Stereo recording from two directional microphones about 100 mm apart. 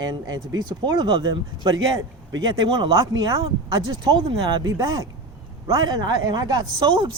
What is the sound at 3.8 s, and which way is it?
Speech, 50° right (ahead or behind).